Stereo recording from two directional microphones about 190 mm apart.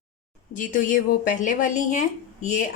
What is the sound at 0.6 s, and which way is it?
A woman's voice, 45° left (ahead or behind).